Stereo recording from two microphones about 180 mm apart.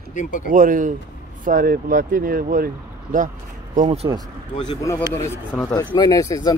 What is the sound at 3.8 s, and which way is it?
Speech, 35° right (ahead or behind).